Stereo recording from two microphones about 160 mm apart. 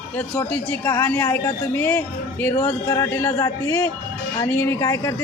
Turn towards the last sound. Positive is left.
turn(degrees=20)  # may be behind; listen again after turning